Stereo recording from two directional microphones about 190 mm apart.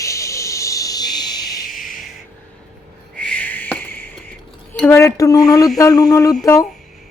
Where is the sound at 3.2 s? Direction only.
5° left (ahead or behind).